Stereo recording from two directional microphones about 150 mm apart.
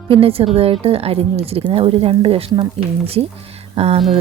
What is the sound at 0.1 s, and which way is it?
Speech, 35° right (ahead or behind).